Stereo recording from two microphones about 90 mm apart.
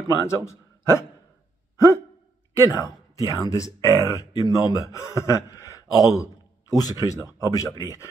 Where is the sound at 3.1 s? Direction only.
40° left (ahead or behind).